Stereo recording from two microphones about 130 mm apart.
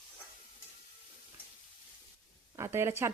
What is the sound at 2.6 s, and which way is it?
Speech, 20° right (ahead or behind).